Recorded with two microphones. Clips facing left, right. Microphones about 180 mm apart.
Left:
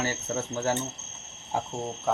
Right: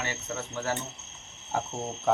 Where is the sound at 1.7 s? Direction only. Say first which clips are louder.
Left 1 dB; centre (ahead or behind).